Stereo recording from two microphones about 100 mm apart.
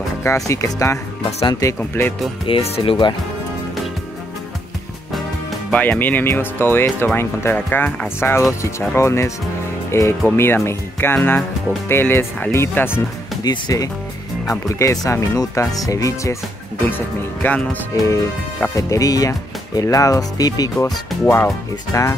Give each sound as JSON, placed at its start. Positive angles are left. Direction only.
{"t": 0.2, "sound": "speech", "side_deg": 30}
{"t": 1.8, "sound": "speech", "side_deg": 20}
{"t": 2.4, "sound": "speech", "side_deg": 75}
{"t": 5.7, "sound": "speech", "side_deg": 15}
{"t": 13.4, "sound": "speech", "side_deg": 40}
{"t": 17.4, "sound": "speech", "side_deg": 15}
{"t": 17.9, "sound": "speech", "side_deg": 30}
{"t": 21.9, "sound": "speech", "side_deg": 35}